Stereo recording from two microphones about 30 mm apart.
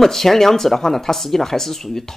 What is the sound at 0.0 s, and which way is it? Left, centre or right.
Speech, centre.